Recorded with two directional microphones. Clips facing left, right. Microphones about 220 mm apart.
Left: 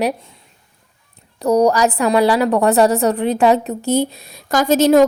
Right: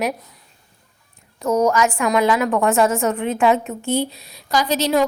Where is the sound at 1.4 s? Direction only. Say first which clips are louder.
Left 4 dB; 35° left (ahead or behind).